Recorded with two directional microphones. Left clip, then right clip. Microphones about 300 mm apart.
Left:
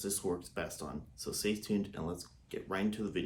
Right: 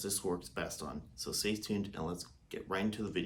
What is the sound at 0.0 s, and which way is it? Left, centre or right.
Speech, centre.